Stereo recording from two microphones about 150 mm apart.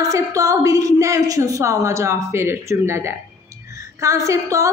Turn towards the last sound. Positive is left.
turn(degrees=-20)  # may be behind; listen again after turning